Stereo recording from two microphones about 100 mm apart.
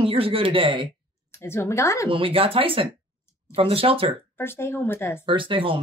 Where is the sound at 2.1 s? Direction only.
65° right (ahead or behind).